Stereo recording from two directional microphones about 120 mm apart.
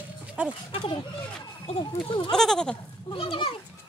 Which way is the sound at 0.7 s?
45° left (ahead or behind).